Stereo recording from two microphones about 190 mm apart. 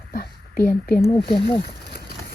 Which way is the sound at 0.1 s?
50° left (ahead or behind).